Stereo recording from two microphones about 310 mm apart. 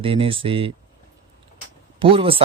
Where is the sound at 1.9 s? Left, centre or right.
Centre.